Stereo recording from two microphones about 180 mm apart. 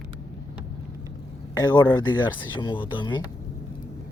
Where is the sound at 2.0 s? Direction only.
25° left (ahead or behind).